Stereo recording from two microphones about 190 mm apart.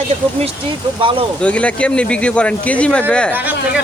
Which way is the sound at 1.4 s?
5° left (ahead or behind).